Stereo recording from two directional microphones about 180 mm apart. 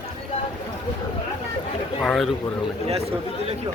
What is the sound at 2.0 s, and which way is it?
Speech, centre (ahead or behind).